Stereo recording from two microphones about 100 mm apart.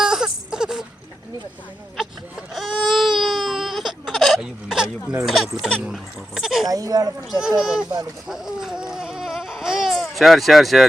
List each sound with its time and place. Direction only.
0.0 s wail: 5° right (ahead or behind)
2.0 s baby cry: centre (ahead or behind)
4.4 s a sound: 5° right (ahead or behind)
5.2 s speech: centre (ahead or behind)
6.7 s speech: 40° right (ahead or behind)
7.3 s speech: 5° right (ahead or behind)
8.3 s baby cry: 5° right (ahead or behind)